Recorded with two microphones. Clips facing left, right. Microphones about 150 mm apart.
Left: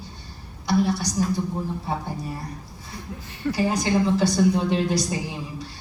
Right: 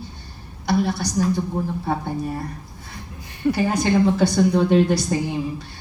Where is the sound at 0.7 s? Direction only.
55° right (ahead or behind).